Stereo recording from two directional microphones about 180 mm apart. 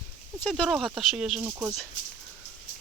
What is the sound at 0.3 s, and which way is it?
Speech, 5° left (ahead or behind).